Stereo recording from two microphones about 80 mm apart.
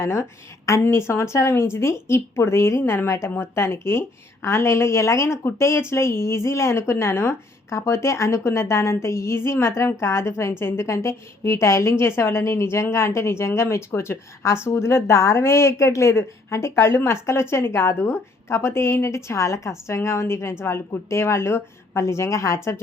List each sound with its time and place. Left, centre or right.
0.0 s a woman's voice: left